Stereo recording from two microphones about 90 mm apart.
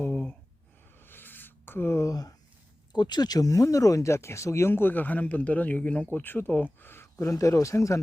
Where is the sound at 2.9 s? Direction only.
55° left (ahead or behind).